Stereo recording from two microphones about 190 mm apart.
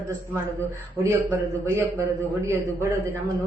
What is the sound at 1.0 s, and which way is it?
A woman's voice, 10° right (ahead or behind).